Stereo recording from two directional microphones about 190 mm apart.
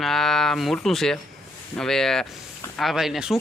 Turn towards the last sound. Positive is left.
turn(degrees=0)  # may be behind; listen again after turning